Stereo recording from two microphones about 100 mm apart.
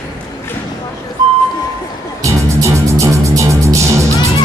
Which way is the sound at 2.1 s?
30° right (ahead or behind).